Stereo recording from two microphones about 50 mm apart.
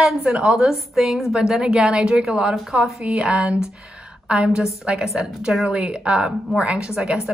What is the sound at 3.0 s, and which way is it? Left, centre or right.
A woman's voice, centre.